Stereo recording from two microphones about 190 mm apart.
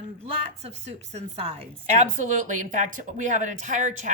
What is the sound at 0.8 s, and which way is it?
A woman's voice, 35° right (ahead or behind).